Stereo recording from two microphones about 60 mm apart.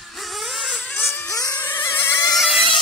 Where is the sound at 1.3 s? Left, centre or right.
Left.